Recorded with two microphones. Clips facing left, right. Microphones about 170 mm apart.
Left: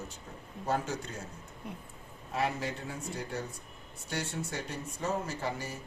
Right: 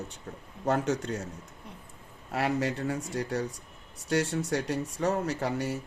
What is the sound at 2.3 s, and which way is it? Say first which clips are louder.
A man's voice: right 4 dB; 75° right (ahead or behind).